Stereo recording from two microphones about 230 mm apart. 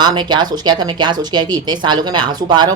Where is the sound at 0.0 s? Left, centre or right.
Centre.